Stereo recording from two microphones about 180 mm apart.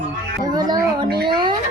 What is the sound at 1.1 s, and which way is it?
Speech, 60° right (ahead or behind).